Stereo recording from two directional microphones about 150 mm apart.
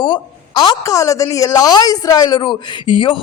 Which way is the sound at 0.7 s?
20° left (ahead or behind).